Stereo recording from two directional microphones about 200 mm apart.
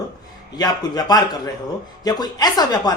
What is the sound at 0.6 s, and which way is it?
Speech, 20° left (ahead or behind).